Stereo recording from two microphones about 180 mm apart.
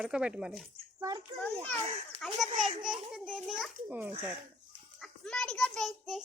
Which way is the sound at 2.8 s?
5° right (ahead or behind).